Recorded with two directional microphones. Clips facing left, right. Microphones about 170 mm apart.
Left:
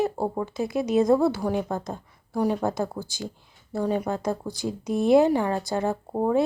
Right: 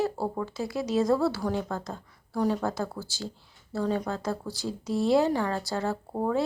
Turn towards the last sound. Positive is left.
turn(degrees=20)  # may be behind; listen again after turning